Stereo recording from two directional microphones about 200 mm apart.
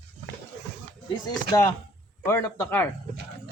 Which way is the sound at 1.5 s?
15° left (ahead or behind).